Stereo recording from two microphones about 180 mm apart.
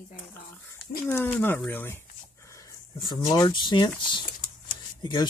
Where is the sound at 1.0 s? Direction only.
10° left (ahead or behind).